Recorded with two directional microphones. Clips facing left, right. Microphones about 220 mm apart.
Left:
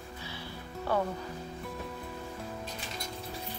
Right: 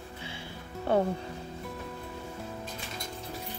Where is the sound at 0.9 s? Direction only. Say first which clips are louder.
Right 4 dB; 25° right (ahead or behind).